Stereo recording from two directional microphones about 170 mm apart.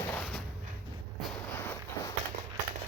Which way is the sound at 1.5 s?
15° left (ahead or behind).